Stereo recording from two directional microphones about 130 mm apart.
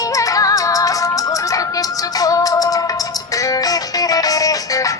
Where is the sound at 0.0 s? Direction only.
25° left (ahead or behind).